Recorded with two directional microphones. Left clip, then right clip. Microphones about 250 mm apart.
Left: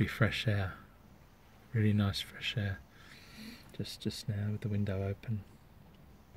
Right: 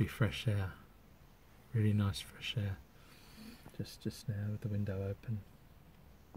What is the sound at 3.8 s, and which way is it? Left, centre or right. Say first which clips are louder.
Speech: left 5 dB; centre.